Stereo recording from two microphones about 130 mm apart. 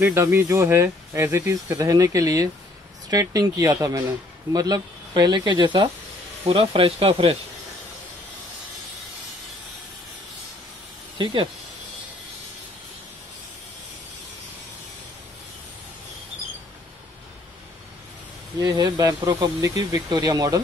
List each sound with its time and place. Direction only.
0.0 s speech: 15° right (ahead or behind); by 5.9 s 35° right (ahead or behind)
6.4 s speech: 45° right (ahead or behind)
11.2 s speech: 40° right (ahead or behind)
18.6 s speech: 30° right (ahead or behind)